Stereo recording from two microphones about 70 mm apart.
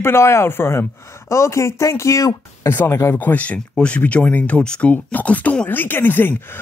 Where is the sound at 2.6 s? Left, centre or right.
Left.